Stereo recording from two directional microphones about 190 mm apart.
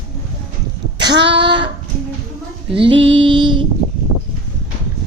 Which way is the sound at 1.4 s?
25° right (ahead or behind).